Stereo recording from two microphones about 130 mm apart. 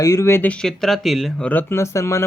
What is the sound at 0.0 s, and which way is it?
Speech, 25° left (ahead or behind).